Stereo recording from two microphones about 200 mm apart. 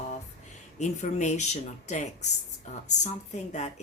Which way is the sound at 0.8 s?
35° left (ahead or behind).